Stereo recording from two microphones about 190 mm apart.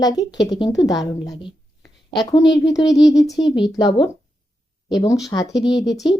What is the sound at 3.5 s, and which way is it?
Speech, 20° left (ahead or behind).